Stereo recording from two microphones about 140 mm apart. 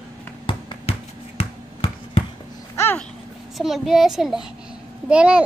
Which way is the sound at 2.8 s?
15° left (ahead or behind).